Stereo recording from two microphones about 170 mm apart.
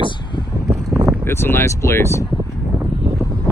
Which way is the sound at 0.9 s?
20° right (ahead or behind).